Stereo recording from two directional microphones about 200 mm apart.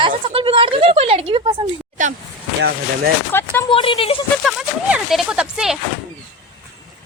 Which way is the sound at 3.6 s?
25° left (ahead or behind).